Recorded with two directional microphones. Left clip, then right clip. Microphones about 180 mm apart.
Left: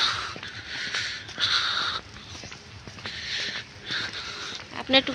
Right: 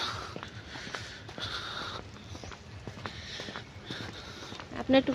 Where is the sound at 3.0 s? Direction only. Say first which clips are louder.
Left 11 dB; 5° right (ahead or behind).